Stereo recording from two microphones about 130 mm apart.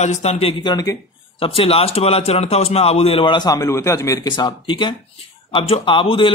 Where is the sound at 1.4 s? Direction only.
50° left (ahead or behind); by 4.3 s 25° left (ahead or behind).